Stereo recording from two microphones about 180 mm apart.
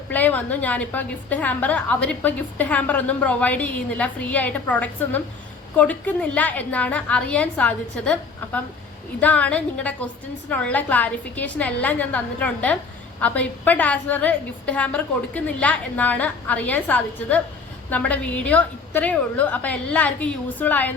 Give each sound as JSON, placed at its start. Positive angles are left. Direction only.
{"t": 0.1, "sound": "a woman's voice", "side_deg": 10}